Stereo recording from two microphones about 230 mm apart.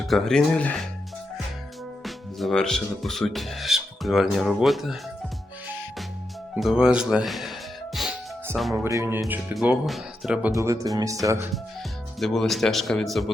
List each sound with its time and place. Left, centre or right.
0.0 s speech: centre
2.0 s speech: centre
6.6 s speech: centre
7.9 s music: centre
8.8 s speech: centre
12.2 s speech: centre